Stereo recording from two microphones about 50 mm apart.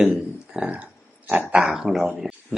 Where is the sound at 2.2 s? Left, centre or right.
Centre.